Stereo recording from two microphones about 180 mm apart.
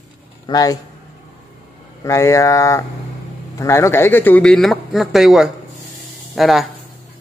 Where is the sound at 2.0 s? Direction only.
15° left (ahead or behind); by 6.7 s centre (ahead or behind).